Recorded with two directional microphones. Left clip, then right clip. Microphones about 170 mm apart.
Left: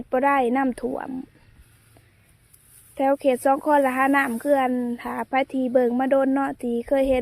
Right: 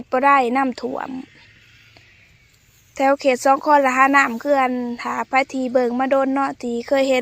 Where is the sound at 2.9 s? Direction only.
10° left (ahead or behind).